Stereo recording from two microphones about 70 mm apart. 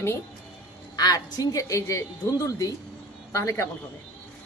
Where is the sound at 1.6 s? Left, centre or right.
Left.